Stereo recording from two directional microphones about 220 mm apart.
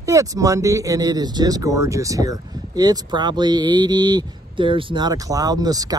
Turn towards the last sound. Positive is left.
turn(degrees=-15)  # may be behind; listen again after turning